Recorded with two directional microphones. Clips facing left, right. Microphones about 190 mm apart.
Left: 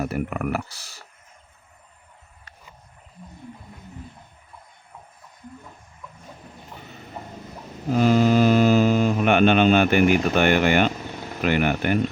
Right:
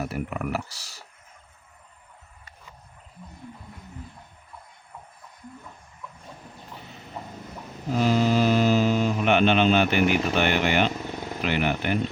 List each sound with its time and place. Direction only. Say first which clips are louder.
0.0 s speech: left 4 dB; 55° left (ahead or behind)
8.0 s mantra: left 4 dB; 50° left (ahead or behind)
11.4 s speech: left 4 dB; 50° left (ahead or behind)